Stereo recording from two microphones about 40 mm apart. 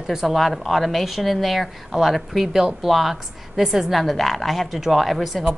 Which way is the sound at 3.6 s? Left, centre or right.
Centre.